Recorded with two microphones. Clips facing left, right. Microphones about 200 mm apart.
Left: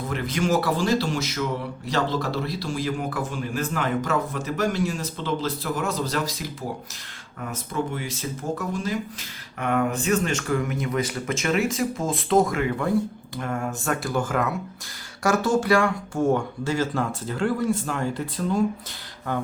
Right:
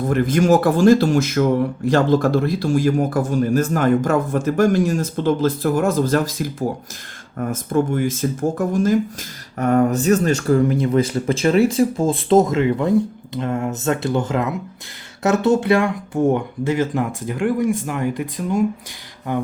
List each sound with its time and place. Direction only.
0.1 s speech: 50° right (ahead or behind); by 19.4 s 15° right (ahead or behind)